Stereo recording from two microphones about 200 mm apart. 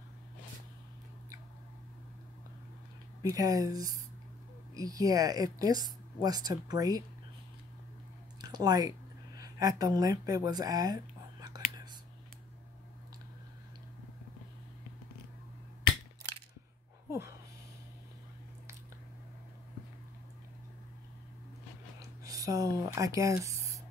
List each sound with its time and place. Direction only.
3.2 s speech: 15° right (ahead or behind)
8.4 s speech: 20° right (ahead or behind)
11.4 s whispering: 20° right (ahead or behind)
22.2 s a sound: 15° right (ahead or behind)